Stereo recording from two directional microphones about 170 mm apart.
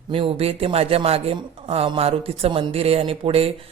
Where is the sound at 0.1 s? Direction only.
35° right (ahead or behind).